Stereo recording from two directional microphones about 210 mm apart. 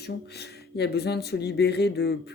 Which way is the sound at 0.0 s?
50° left (ahead or behind).